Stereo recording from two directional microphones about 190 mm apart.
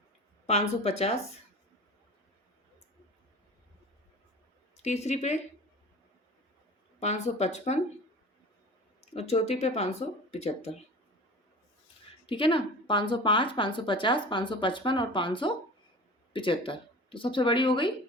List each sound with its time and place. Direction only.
0.4 s speech: 35° left (ahead or behind)
4.8 s speech: 35° left (ahead or behind)
7.0 s speech: 35° left (ahead or behind)
9.0 s speech: 35° left (ahead or behind)
12.2 s a woman's voice: 25° left (ahead or behind)